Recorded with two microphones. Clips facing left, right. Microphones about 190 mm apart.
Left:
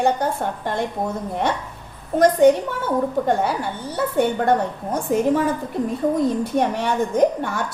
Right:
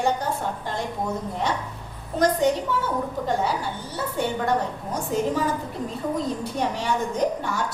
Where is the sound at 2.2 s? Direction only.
55° left (ahead or behind).